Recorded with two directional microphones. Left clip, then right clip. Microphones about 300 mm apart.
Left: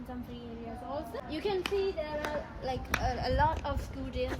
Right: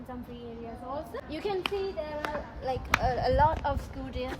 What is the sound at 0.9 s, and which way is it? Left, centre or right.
A woman's voice, centre.